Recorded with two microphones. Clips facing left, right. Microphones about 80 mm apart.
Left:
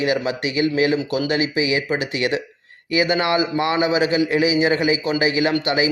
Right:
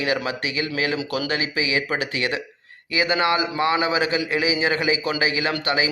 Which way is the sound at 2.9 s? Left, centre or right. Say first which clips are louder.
Left 2 dB; right.